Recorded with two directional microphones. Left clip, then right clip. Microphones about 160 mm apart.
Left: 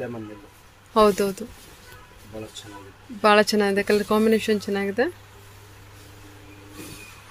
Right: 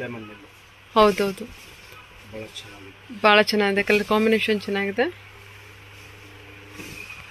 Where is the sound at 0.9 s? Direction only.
15° left (ahead or behind).